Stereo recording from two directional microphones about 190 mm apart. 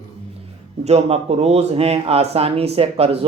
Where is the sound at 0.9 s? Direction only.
35° right (ahead or behind).